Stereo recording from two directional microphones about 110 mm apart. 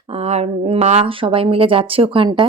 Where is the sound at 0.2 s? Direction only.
80° right.